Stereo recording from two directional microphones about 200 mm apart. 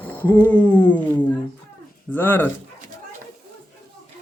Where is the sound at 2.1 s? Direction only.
10° left (ahead or behind).